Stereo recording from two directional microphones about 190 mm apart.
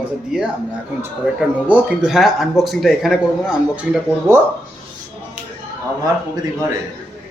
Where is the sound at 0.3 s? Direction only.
Centre (ahead or behind).